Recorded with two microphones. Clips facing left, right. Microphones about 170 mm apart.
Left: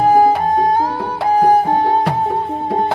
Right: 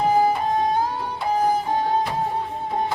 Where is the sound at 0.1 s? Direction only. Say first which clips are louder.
Left 7 dB; 60° left (ahead or behind).